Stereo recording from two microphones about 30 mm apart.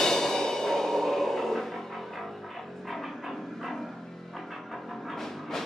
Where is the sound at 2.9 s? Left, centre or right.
Centre.